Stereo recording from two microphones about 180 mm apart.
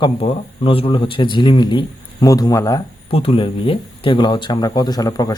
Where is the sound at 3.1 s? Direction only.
30° left (ahead or behind).